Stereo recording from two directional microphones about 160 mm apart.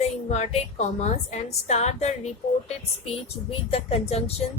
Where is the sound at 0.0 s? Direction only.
45° left (ahead or behind).